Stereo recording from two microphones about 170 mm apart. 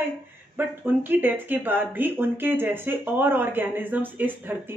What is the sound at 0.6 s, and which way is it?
Speech, 10° right (ahead or behind).